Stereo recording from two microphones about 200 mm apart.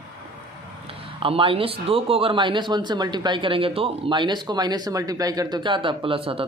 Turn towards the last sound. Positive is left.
turn(degrees=-25)  # may be behind; listen again after turning